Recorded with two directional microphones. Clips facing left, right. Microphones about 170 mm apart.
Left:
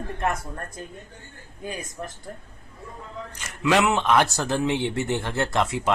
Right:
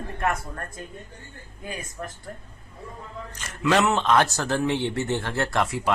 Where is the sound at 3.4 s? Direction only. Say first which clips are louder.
Even; 15° left (ahead or behind).